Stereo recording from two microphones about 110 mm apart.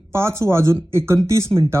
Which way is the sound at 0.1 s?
25° right (ahead or behind).